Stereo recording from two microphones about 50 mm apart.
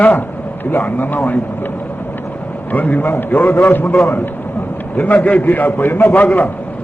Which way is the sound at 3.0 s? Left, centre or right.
Left.